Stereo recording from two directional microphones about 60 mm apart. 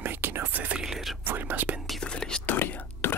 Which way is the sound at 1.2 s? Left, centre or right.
Right.